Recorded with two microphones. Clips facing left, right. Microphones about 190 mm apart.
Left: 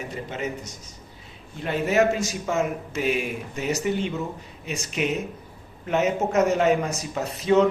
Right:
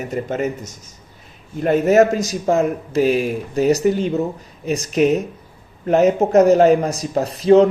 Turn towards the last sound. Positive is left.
turn(degrees=-35)  # may be behind; listen again after turning